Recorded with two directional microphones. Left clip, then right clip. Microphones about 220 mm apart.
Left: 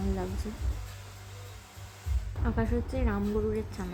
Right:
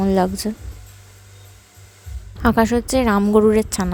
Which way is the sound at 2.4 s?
50° right (ahead or behind).